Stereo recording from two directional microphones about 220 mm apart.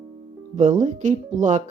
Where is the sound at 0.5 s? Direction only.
35° right (ahead or behind).